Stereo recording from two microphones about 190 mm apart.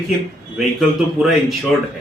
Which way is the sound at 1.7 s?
Centre (ahead or behind).